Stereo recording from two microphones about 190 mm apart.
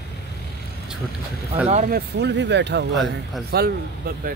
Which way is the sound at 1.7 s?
45° right (ahead or behind).